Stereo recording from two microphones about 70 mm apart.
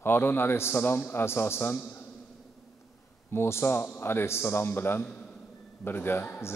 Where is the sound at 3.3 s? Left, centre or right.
Left.